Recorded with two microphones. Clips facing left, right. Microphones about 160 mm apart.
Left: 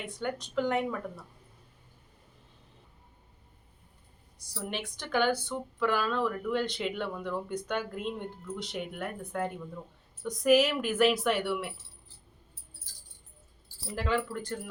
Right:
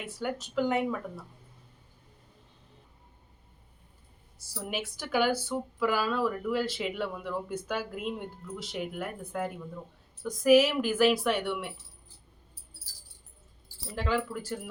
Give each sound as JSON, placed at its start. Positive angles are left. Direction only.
{"t": 0.0, "sound": "speech", "side_deg": -5}
{"t": 4.4, "sound": "speech", "side_deg": -5}
{"t": 13.9, "sound": "speech", "side_deg": 0}